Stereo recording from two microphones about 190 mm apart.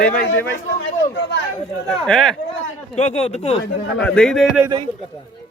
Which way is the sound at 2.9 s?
35° left (ahead or behind).